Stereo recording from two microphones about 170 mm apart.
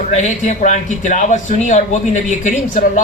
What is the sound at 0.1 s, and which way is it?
A man's voice, 45° left (ahead or behind).